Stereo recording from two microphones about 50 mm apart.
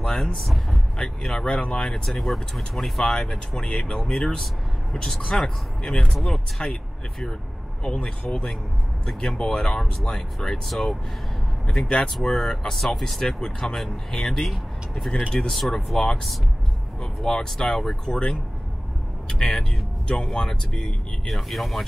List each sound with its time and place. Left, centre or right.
0.0 s speech: centre
3.1 s speech: centre
5.8 s speech: centre
7.8 s speech: centre
17.0 s speech: centre